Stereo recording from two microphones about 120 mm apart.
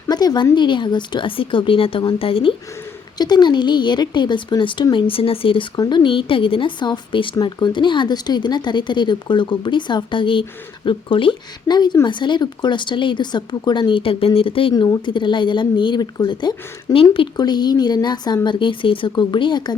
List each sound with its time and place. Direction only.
0.1 s a sound: 35° left (ahead or behind)
0.5 s a woman's voice: 40° left (ahead or behind)
3.2 s a woman's voice: 35° left (ahead or behind)
17.3 s speech: 35° left (ahead or behind)